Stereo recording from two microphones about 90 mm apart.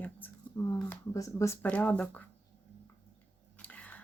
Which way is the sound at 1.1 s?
35° left (ahead or behind).